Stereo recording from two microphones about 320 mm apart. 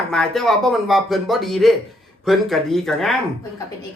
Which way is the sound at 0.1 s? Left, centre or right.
Centre.